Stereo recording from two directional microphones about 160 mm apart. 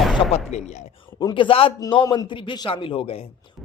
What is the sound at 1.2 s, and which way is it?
Speech, 30° left (ahead or behind).